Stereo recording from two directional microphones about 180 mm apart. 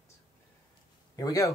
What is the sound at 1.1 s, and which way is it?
Speech, 20° left (ahead or behind).